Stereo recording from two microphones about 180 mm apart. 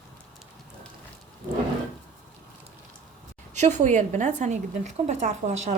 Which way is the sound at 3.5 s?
40° right (ahead or behind).